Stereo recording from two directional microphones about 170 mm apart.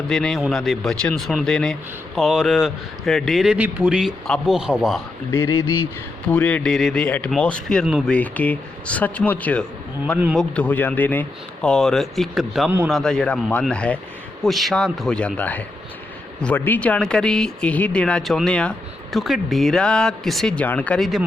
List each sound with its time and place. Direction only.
0.1 s a man's voice: centre (ahead or behind)
5.3 s a man's voice: 15° left (ahead or behind); by 21.2 s centre (ahead or behind)